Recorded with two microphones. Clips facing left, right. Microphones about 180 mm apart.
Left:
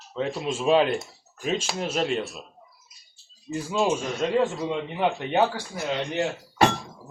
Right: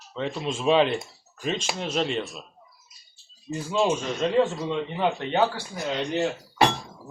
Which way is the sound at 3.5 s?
5° left (ahead or behind).